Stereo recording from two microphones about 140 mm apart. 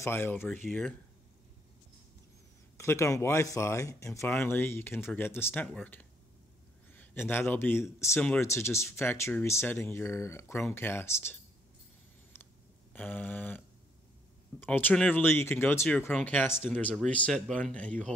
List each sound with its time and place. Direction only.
0.0 s speech: 15° left (ahead or behind)
2.8 s a man's voice: 20° left (ahead or behind)
12.9 s speech: 10° left (ahead or behind)
14.6 s speech: 10° left (ahead or behind)